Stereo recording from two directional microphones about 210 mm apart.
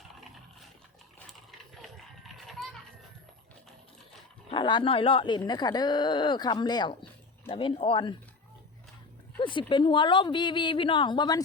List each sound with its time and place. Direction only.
1.3 s children playing: centre (ahead or behind)
4.5 s speech: 20° left (ahead or behind)
9.4 s speech: 25° left (ahead or behind)